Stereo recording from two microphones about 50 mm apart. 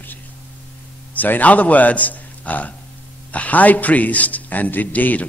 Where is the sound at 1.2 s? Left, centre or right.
Left.